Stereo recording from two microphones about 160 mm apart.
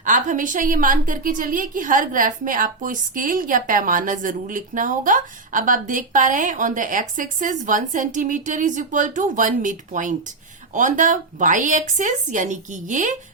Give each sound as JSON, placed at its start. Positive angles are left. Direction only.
{"t": 0.0, "sound": "a woman's voice", "side_deg": -55}